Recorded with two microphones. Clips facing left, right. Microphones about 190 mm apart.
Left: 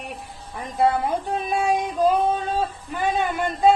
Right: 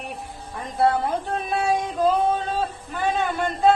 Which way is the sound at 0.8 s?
10° left (ahead or behind).